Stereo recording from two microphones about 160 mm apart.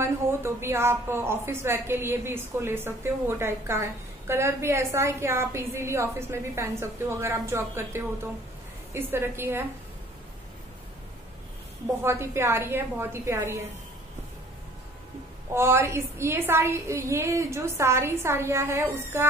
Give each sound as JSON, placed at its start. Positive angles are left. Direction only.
{"t": 0.0, "sound": "a woman's voice", "side_deg": -15}
{"t": 12.0, "sound": "a woman's voice", "side_deg": -15}
{"t": 15.5, "sound": "a woman's voice", "side_deg": -15}